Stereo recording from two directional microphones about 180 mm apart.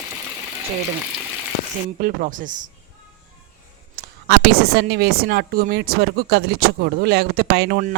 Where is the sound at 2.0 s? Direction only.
50° right (ahead or behind).